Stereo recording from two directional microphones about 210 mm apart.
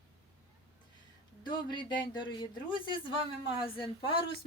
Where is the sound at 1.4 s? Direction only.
20° left (ahead or behind).